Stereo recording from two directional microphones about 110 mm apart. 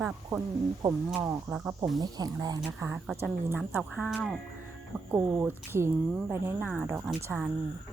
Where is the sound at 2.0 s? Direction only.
35° right (ahead or behind).